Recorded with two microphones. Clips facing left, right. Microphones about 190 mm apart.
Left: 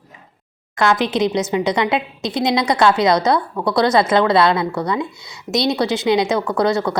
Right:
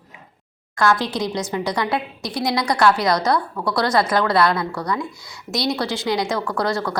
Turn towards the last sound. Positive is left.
turn(degrees=20)  # may be behind; listen again after turning